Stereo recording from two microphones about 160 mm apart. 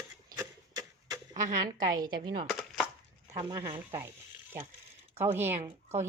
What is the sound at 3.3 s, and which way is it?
Speech, 20° right (ahead or behind).